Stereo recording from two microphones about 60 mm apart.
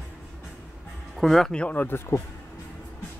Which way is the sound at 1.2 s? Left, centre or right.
Centre.